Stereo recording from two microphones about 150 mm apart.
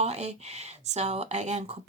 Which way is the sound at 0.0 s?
50° right (ahead or behind).